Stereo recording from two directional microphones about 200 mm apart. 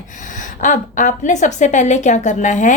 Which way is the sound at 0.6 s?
40° left (ahead or behind).